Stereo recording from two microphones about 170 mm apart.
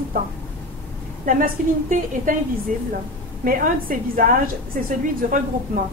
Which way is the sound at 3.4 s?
55° right (ahead or behind).